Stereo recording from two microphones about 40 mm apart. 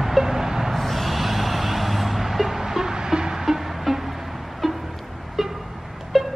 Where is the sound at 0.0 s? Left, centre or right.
Centre.